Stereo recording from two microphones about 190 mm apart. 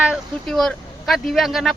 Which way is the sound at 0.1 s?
Centre (ahead or behind).